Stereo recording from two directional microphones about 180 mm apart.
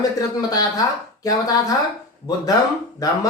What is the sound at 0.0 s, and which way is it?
Speech, 20° left (ahead or behind).